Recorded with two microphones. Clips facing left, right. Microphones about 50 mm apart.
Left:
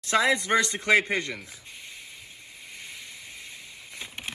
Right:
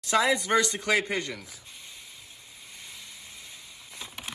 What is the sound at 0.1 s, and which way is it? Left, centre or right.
Speech, left.